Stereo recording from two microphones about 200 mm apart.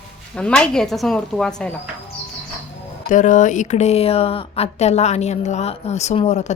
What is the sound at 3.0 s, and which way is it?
Speech, 40° left (ahead or behind).